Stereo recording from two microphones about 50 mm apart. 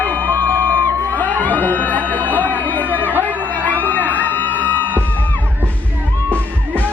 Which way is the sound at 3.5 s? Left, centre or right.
Left.